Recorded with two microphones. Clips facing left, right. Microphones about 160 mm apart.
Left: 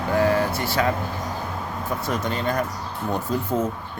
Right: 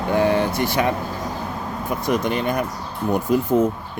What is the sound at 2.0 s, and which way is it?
Speech, 15° right (ahead or behind).